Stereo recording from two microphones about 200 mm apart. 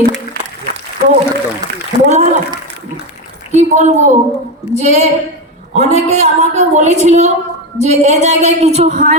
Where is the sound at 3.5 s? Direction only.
35° right (ahead or behind).